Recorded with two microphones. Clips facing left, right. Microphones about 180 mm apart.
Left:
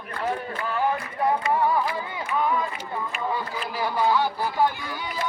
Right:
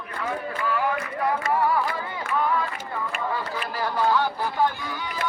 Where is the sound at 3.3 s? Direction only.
10° left (ahead or behind).